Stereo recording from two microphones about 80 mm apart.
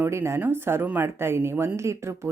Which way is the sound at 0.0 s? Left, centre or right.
Right.